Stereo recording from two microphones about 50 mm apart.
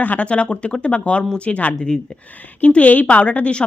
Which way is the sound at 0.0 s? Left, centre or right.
Left.